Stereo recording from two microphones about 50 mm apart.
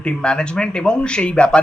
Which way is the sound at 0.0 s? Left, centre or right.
Centre.